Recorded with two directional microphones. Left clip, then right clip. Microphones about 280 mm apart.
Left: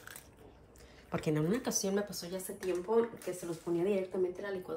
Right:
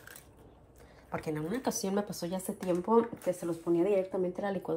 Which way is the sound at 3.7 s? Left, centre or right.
Right.